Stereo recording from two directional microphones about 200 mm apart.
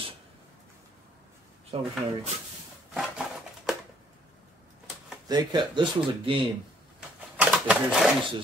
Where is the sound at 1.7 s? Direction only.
30° right (ahead or behind).